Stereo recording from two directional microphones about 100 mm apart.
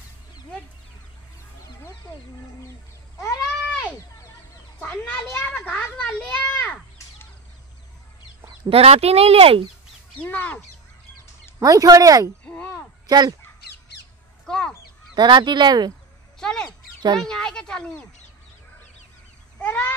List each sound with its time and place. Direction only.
3.3 s goat: 15° left (ahead or behind)
4.8 s a child's voice: 15° left (ahead or behind)
8.6 s speech: 80° right
10.2 s a child's voice: 15° left (ahead or behind)
11.6 s speech: 35° right (ahead or behind)
12.4 s a sound: 10° left (ahead or behind)
13.0 s speech: 45° right (ahead or behind)
14.4 s crow: 5° left (ahead or behind)
15.1 s speech: 50° right (ahead or behind)
16.3 s a sound: 5° left (ahead or behind)
17.2 s a child's voice: 5° left (ahead or behind)
19.6 s speech: 20° left (ahead or behind)